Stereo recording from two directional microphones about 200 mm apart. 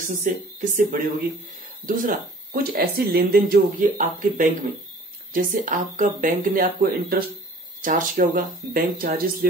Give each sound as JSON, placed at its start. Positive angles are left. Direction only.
{"t": 0.0, "sound": "speech", "side_deg": -40}